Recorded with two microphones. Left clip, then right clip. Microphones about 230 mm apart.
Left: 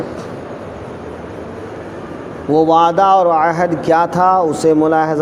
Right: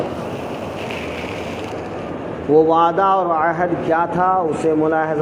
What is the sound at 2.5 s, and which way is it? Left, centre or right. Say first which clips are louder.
Speech: left 2 dB; left.